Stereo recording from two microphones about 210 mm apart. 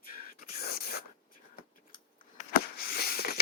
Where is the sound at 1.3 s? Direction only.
40° left (ahead or behind).